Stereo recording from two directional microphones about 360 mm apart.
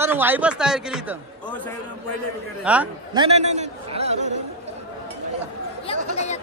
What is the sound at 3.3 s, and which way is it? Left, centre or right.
Speech, centre.